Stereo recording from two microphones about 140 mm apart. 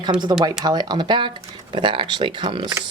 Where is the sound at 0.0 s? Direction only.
30° right (ahead or behind).